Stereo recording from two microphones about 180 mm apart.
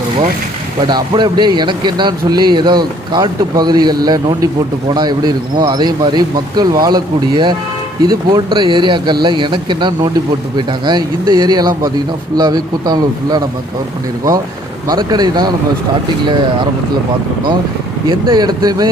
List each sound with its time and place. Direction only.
0.9 s speech: 25° right (ahead or behind)
14.8 s speech: 25° right (ahead or behind)
18.1 s speech: 25° right (ahead or behind)